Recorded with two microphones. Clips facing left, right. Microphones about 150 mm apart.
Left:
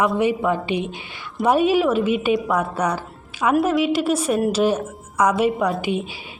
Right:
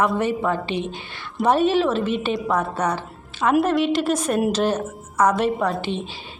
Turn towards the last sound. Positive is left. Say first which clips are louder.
# left 2 dB
turn(degrees=10)  # may be behind; listen again after turning